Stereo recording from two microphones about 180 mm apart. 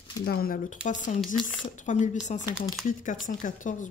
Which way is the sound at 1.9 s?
45° left (ahead or behind).